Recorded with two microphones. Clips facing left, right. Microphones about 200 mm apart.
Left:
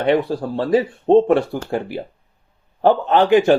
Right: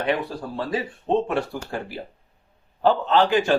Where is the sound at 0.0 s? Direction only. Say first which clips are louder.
Left 7 dB; 65° left (ahead or behind).